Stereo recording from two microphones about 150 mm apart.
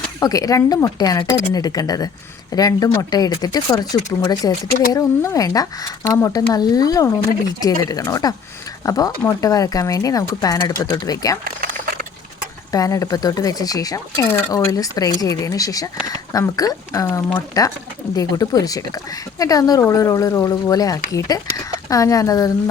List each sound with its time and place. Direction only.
0.2 s speech: 25° left (ahead or behind)
12.7 s speech: 20° left (ahead or behind)